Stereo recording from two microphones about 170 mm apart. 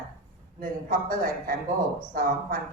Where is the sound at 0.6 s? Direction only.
55° right (ahead or behind).